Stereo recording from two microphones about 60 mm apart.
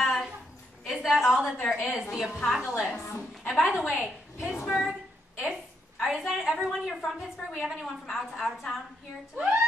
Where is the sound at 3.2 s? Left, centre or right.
Centre.